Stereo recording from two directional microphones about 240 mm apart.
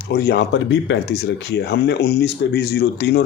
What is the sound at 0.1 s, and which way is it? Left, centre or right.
Speech, left.